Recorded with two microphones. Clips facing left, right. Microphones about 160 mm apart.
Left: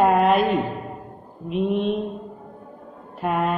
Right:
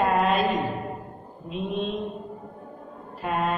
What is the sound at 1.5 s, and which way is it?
Speech, 65° left (ahead or behind).